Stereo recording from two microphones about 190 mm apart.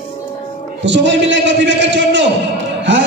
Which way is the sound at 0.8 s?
70° right (ahead or behind).